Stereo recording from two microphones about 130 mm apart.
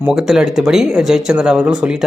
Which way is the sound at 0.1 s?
5° right (ahead or behind).